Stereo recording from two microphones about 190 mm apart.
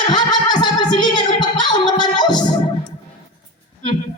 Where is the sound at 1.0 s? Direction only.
25° left (ahead or behind).